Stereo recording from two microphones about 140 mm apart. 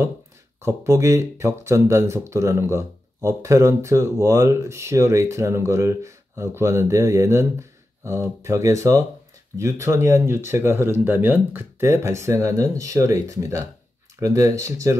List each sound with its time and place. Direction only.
0.6 s speech: 20° right (ahead or behind)